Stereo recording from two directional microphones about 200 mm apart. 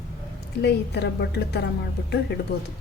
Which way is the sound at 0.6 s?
55° left (ahead or behind).